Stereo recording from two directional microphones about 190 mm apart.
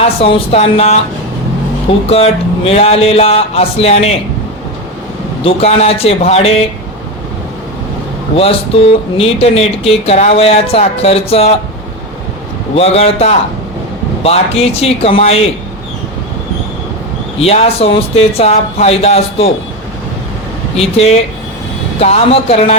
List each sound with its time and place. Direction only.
0.0 s speech: 30° left (ahead or behind)
5.4 s speech: 30° left (ahead or behind)
8.4 s speech: 30° left (ahead or behind)
12.7 s speech: 30° left (ahead or behind)
17.4 s speech: 30° left (ahead or behind)
20.7 s speech: 30° left (ahead or behind)